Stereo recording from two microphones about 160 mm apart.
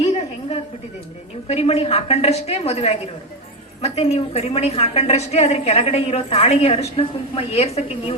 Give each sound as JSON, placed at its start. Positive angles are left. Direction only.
{"t": 1.5, "sound": "a woman's voice", "side_deg": 40}